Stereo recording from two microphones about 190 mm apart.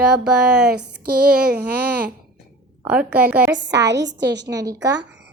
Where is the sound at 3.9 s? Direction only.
65° right (ahead or behind).